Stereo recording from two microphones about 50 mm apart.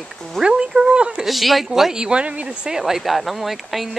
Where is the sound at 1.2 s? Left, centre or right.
Centre.